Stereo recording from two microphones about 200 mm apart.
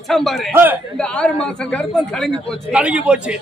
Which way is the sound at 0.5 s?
10° right (ahead or behind).